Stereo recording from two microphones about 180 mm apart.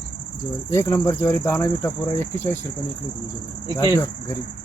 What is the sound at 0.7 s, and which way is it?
Speech, 15° left (ahead or behind).